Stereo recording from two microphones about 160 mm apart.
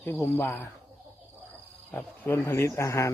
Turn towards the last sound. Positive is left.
turn(degrees=20)  # may be behind; listen again after turning